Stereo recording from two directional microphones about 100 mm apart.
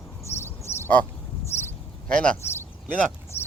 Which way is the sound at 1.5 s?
90° left.